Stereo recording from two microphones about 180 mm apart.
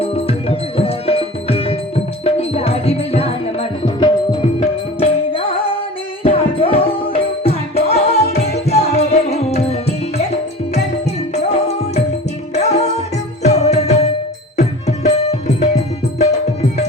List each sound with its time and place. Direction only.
0.0 s music: 35° left (ahead or behind)
11.3 s music: 35° left (ahead or behind)